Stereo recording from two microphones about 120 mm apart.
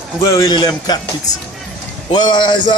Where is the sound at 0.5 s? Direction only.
35° left (ahead or behind).